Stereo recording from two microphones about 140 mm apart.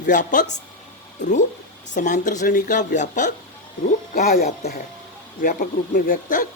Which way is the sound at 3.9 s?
80° left.